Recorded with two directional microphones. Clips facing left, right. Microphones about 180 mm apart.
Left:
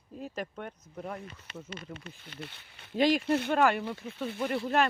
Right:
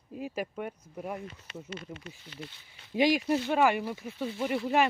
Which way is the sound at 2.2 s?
60° left (ahead or behind).